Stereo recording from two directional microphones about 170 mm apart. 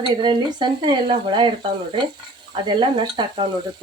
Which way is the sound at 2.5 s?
25° right (ahead or behind).